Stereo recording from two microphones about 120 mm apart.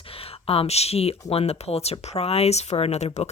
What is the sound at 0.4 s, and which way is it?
Speech, 55° left (ahead or behind).